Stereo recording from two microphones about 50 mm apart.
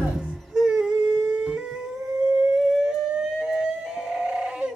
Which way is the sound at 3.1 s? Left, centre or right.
Centre.